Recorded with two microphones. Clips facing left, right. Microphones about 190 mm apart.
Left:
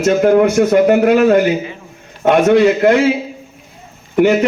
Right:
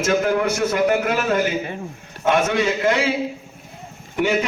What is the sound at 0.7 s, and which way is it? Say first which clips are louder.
Speech: left 9 dB; 40° left (ahead or behind).